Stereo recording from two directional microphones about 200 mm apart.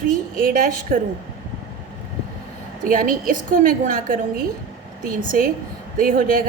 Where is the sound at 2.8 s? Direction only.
45° right (ahead or behind).